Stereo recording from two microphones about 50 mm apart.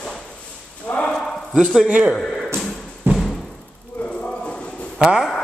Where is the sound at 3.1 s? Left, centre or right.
Centre.